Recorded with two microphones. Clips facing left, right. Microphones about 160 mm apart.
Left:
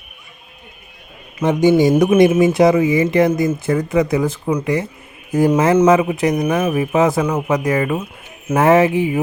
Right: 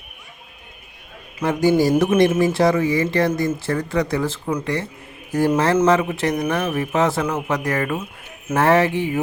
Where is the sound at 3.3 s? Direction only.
Centre (ahead or behind).